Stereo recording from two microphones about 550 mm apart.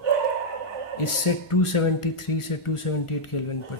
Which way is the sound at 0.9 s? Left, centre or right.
Left.